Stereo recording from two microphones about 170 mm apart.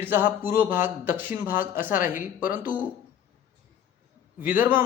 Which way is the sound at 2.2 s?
55° left (ahead or behind).